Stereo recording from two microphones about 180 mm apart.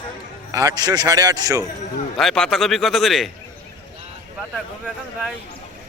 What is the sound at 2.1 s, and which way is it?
A man's voice, 5° left (ahead or behind).